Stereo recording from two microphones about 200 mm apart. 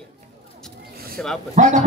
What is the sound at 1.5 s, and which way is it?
Speech, 40° right (ahead or behind).